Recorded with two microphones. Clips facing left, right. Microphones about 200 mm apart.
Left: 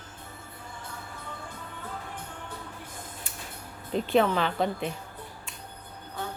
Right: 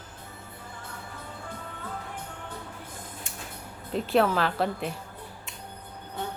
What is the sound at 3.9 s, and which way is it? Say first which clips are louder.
Speech: even; centre (ahead or behind).